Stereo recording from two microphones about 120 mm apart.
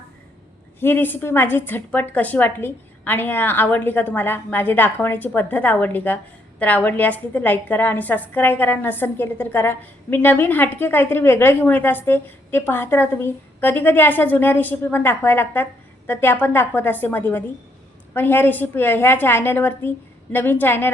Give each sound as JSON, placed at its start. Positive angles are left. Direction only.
{"t": 0.8, "sound": "a woman's voice", "side_deg": 20}